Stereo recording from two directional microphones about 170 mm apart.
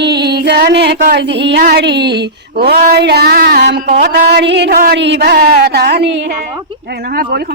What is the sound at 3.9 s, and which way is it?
Speech, 60° right (ahead or behind).